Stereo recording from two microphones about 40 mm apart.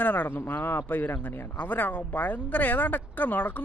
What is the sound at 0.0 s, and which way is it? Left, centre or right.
Speech, left.